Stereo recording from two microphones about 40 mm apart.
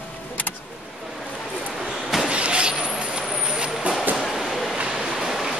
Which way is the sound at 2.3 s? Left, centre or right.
Right.